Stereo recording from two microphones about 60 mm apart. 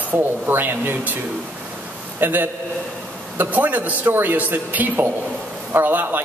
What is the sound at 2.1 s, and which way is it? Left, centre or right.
A man's voice, right.